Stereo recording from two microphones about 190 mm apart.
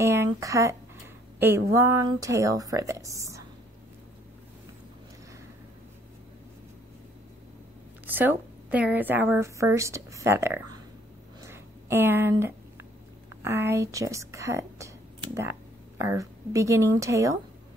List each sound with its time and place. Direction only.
0.0 s a woman's voice: 15° right (ahead or behind)
8.1 s a woman's voice: 10° right (ahead or behind)
11.4 s a sound: 10° right (ahead or behind)
13.4 s a woman's voice: 10° right (ahead or behind)